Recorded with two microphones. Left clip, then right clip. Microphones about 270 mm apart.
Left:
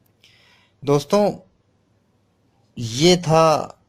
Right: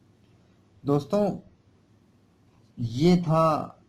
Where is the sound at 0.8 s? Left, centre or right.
Left.